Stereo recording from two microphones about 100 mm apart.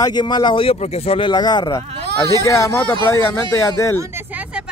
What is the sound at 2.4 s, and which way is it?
Speech, 30° left (ahead or behind).